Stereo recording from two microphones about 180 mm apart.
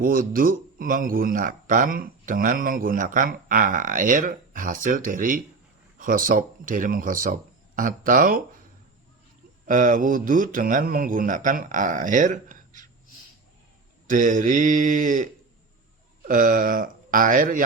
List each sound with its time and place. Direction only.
0.0 s a man's voice: 50° right (ahead or behind)
9.6 s a man's voice: 45° right (ahead or behind)
14.1 s a man's voice: 45° right (ahead or behind)